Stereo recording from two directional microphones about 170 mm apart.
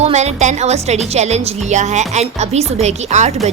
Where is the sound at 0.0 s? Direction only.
40° right (ahead or behind).